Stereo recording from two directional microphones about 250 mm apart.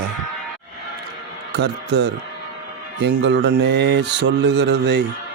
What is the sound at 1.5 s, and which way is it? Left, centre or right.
Mantra, right.